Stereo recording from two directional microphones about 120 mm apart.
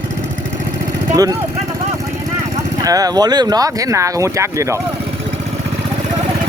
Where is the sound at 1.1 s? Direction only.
30° right (ahead or behind).